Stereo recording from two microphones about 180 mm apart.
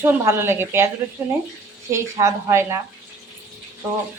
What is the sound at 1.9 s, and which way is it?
Speech, 15° right (ahead or behind).